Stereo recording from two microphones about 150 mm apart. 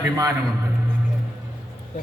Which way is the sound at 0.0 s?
20° right (ahead or behind).